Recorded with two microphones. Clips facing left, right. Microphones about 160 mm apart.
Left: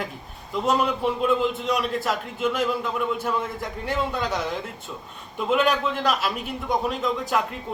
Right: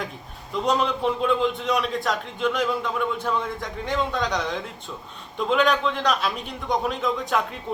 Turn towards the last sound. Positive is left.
turn(degrees=0)  # may be behind; listen again after turning